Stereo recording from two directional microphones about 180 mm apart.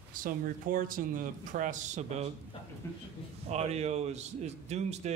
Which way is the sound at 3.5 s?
35° right (ahead or behind).